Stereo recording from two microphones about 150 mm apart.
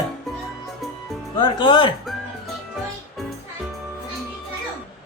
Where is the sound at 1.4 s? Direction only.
30° left (ahead or behind).